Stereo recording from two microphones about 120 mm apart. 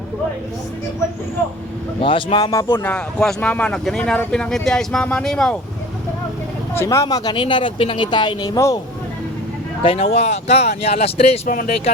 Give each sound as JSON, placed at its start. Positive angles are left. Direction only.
{"t": 2.0, "sound": "speech", "side_deg": 45}
{"t": 2.4, "sound": "speech", "side_deg": 30}
{"t": 2.8, "sound": "speech", "side_deg": 5}
{"t": 6.7, "sound": "speech", "side_deg": 25}
{"t": 9.8, "sound": "speech", "side_deg": 60}